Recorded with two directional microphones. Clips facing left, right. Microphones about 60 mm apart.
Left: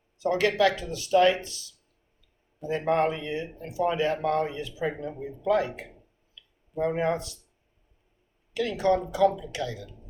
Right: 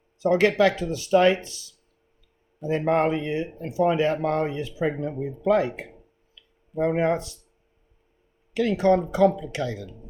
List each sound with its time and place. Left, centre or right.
0.2 s speech: right
2.6 s speech: right
8.5 s speech: right